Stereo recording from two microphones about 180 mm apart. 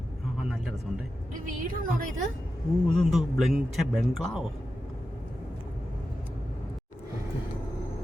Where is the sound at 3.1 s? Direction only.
Centre (ahead or behind).